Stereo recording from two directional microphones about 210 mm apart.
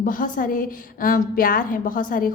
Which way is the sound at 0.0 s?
40° left (ahead or behind).